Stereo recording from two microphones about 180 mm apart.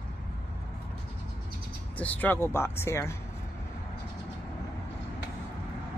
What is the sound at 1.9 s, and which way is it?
Speech, 10° left (ahead or behind).